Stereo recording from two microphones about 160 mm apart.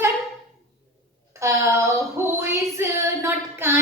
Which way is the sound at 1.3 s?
20° right (ahead or behind).